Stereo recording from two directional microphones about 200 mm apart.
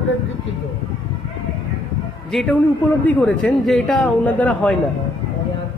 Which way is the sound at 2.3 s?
5° left (ahead or behind).